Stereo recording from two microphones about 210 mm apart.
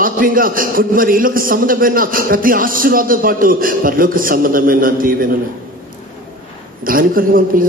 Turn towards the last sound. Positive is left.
turn(degrees=-40)  # may be behind; listen again after turning